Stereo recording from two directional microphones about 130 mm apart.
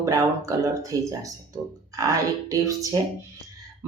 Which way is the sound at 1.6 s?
10° right (ahead or behind).